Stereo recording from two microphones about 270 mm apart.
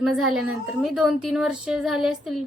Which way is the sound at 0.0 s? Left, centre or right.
Centre.